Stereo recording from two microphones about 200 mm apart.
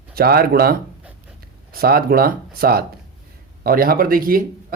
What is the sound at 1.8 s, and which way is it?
Speech, 50° right (ahead or behind).